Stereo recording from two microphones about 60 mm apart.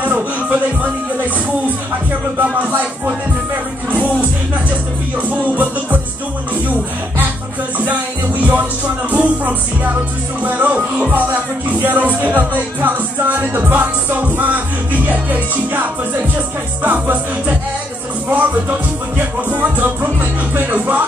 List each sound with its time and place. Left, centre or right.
0.0 s music: right
2.6 s speech: right
3.9 s music: right
5.5 s speech: right
8.4 s speech: right
11.8 s music: right
12.2 s speech: right